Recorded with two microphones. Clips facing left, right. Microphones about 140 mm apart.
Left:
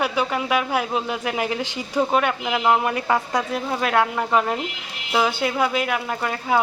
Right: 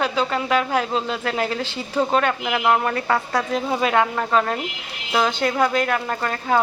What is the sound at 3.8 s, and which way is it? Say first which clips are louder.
A woman's voice: left 1 dB; 5° left (ahead or behind).